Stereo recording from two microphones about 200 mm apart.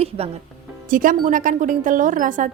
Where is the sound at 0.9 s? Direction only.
45° right (ahead or behind).